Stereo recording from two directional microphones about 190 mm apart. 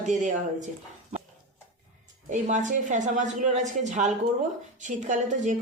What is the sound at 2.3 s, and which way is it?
A woman's voice, 40° right (ahead or behind).